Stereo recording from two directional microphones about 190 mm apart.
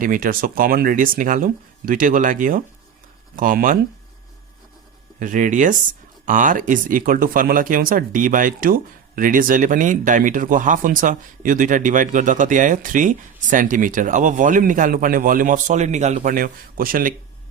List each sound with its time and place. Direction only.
0.0 s speech: 45° right (ahead or behind)
5.2 s speech: 45° right (ahead or behind)